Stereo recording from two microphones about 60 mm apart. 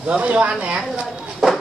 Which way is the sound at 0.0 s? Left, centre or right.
Right.